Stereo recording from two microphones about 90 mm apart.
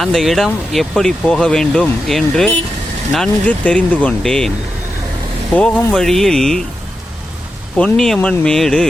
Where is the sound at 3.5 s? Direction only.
15° left (ahead or behind).